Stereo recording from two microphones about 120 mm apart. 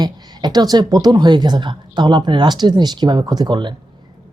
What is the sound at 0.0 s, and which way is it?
Speech, 35° right (ahead or behind).